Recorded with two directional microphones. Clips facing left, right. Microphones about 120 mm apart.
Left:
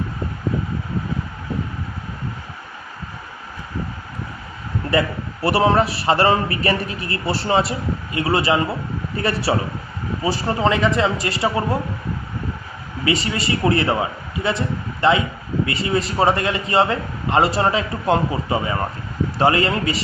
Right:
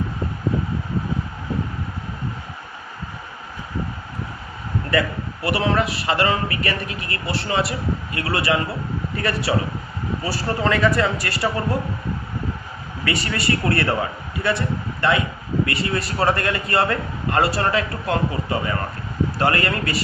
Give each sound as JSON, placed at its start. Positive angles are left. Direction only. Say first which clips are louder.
{"t": 4.9, "sound": "a man's voice", "louder": "left 2 dB", "side_deg": 30}
{"t": 13.1, "sound": "a man's voice", "louder": "left 2 dB", "side_deg": 20}
{"t": 15.6, "sound": "a man's voice", "louder": "left 4 dB", "side_deg": 20}